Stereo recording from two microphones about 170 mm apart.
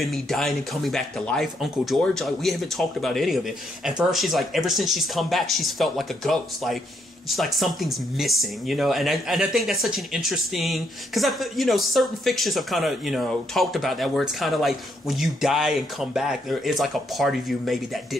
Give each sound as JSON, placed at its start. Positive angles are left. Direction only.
{"t": 0.0, "sound": "speech", "side_deg": 0}